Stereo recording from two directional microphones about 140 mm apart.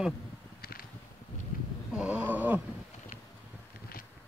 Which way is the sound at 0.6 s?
90° left.